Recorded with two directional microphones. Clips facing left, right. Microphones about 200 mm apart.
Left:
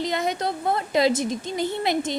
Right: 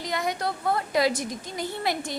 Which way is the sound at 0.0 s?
25° left (ahead or behind).